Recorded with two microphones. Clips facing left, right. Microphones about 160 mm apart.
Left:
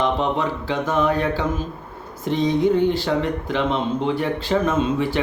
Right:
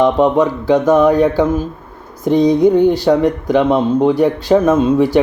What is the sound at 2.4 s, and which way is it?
Mantra, 40° right (ahead or behind).